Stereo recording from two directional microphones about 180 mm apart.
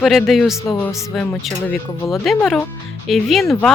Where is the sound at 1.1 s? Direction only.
5° left (ahead or behind).